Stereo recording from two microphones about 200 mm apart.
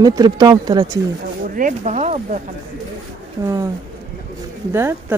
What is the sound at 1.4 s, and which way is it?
Speech, 40° right (ahead or behind).